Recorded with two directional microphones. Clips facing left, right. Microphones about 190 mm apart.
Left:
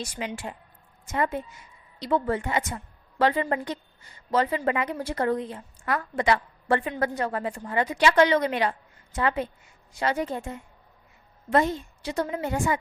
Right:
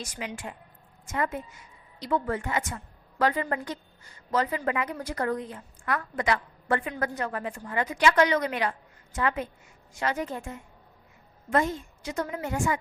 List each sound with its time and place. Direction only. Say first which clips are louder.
0.0 s a woman's voice: left 3 dB; 30° left (ahead or behind)